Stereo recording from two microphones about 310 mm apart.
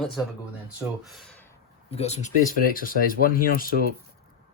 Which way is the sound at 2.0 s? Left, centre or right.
Left.